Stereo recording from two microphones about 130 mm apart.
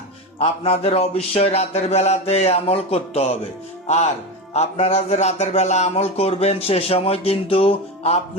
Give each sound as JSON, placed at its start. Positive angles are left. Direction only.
{"t": 0.3, "sound": "speech", "side_deg": 50}